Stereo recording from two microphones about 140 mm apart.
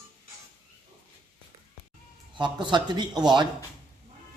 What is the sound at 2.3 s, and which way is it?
Speech, 35° right (ahead or behind).